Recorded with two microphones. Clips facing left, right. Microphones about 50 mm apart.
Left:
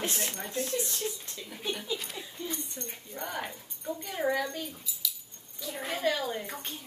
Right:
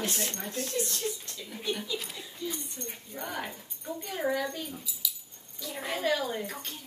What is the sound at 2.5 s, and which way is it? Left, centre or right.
Speech, centre.